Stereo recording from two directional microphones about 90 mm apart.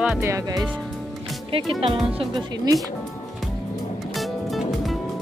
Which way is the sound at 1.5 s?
90° right.